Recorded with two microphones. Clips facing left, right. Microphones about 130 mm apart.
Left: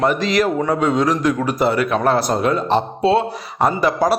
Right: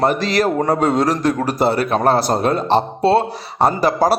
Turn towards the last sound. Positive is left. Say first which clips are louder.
# right 1 dB
turn(degrees=-35)  # may be behind; listen again after turning